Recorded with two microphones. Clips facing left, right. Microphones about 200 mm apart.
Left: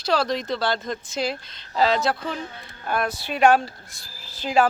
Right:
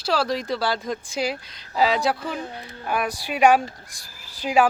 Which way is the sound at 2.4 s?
35° right (ahead or behind).